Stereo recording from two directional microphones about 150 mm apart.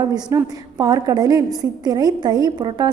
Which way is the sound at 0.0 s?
25° right (ahead or behind).